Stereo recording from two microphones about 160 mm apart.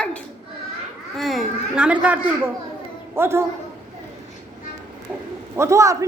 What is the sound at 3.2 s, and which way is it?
Speech, 15° right (ahead or behind).